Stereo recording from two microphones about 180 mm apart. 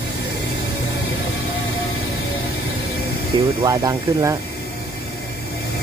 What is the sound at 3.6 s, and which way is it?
Speech, 20° right (ahead or behind).